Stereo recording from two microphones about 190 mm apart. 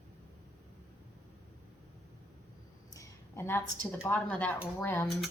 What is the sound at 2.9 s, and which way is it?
A woman's voice, 15° left (ahead or behind).